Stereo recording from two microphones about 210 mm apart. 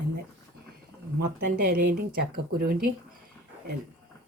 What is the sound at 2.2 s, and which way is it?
Speech, 45° right (ahead or behind).